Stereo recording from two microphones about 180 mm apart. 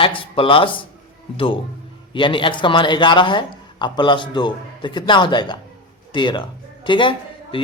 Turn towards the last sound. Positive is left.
turn(degrees=30)  # may be behind; listen again after turning